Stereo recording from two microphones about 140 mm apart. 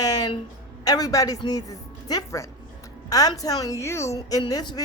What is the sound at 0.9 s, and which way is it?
A woman's voice, 25° left (ahead or behind).